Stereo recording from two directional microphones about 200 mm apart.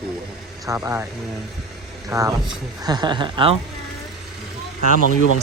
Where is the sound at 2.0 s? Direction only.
15° right (ahead or behind).